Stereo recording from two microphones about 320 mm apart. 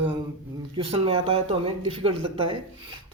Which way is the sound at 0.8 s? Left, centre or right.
Centre.